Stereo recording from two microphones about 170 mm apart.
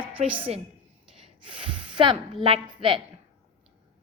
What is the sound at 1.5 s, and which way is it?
A woman's voice, 30° right (ahead or behind).